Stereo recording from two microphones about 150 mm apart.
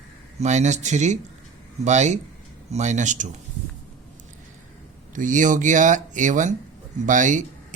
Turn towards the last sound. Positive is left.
turn(degrees=-55)  # may be behind; listen again after turning